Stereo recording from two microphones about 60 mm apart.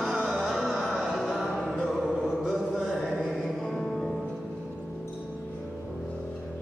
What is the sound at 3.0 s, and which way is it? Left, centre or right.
Mantra, centre.